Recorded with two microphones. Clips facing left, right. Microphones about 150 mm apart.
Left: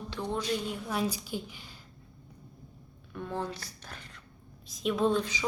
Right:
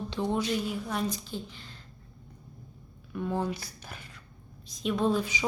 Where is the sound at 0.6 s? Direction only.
Centre (ahead or behind).